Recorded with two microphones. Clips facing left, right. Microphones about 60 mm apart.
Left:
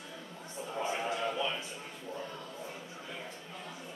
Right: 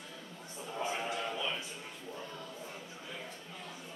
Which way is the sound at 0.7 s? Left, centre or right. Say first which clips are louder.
Left 2 dB; centre.